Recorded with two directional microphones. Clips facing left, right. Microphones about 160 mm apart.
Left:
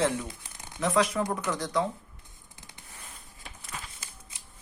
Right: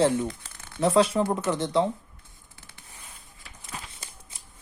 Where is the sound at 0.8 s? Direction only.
30° right (ahead or behind).